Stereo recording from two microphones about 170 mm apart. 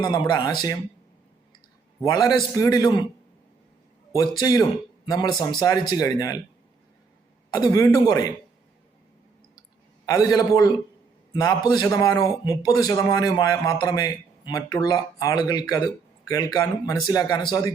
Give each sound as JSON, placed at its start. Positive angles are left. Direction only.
{"t": 0.1, "sound": "a man's voice", "side_deg": 20}
{"t": 2.0, "sound": "a man's voice", "side_deg": 20}
{"t": 4.1, "sound": "a man's voice", "side_deg": 20}
{"t": 7.5, "sound": "a man's voice", "side_deg": 20}
{"t": 10.1, "sound": "a man's voice", "side_deg": 20}